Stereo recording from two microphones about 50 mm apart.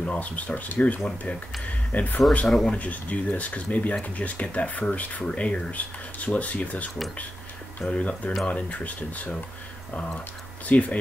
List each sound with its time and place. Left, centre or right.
0.0 s speech: left
2.4 s speech: centre
2.7 s speech: left
10.7 s speech: left